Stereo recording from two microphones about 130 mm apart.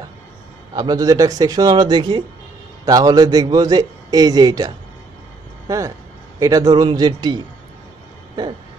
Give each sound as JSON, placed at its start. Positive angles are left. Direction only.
{"t": 0.7, "sound": "a man's voice", "side_deg": -30}
{"t": 8.4, "sound": "a man's voice", "side_deg": -30}